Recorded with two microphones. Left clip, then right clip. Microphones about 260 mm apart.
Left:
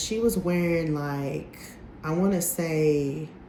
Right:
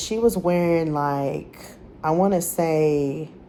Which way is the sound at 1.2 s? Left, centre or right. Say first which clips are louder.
Right 6 dB; centre.